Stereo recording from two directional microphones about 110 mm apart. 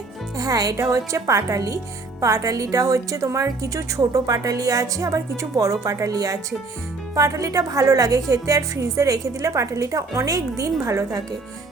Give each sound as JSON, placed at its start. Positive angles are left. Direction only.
{"t": 0.3, "sound": "a woman's voice", "side_deg": -35}